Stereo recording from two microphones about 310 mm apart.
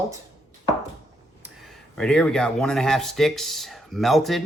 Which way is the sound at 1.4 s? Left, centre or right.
Centre.